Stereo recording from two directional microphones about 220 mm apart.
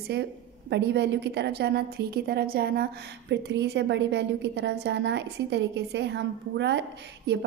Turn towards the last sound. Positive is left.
turn(degrees=-50)  # may be behind; listen again after turning